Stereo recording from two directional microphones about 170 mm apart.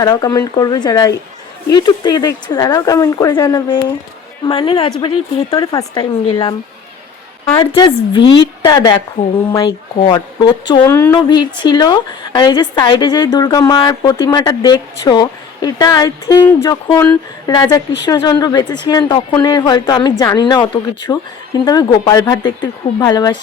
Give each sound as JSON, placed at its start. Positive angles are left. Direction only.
{"t": 0.0, "sound": "a woman's voice", "side_deg": 20}
{"t": 3.5, "sound": "a woman's voice", "side_deg": 30}
{"t": 7.5, "sound": "a woman's voice", "side_deg": 30}
{"t": 10.8, "sound": "speech", "side_deg": 15}
{"t": 11.3, "sound": "a woman's voice", "side_deg": 25}